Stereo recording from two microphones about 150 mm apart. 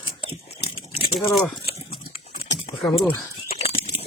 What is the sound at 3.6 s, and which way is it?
Bird, 40° left (ahead or behind).